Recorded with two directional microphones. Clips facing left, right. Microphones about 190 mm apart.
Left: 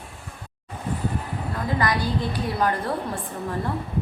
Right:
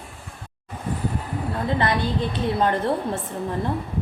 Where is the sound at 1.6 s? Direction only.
25° right (ahead or behind).